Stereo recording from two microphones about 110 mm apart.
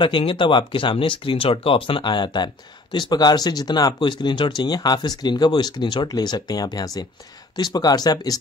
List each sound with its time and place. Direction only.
0.0 s speech: 50° left (ahead or behind)